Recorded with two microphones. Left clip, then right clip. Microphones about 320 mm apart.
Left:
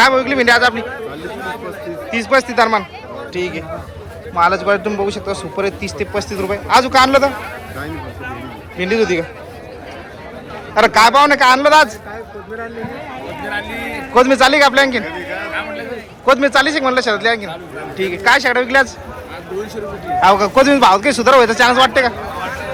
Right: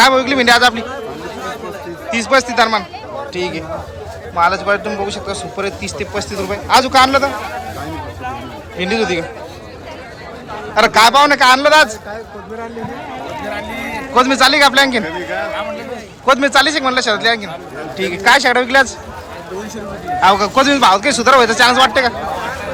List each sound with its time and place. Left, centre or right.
0.0 s a man's voice: centre
2.0 s a man's voice: centre
8.8 s a man's voice: centre
10.8 s a man's voice: centre
14.1 s a man's voice: centre
16.2 s a man's voice: centre
20.2 s a man's voice: centre